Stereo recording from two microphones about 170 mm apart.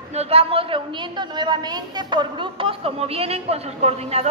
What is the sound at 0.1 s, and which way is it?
A woman's voice, 35° right (ahead or behind).